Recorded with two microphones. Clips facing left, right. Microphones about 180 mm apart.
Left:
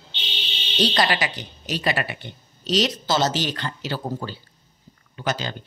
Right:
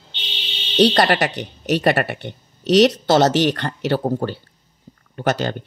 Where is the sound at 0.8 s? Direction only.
65° right (ahead or behind).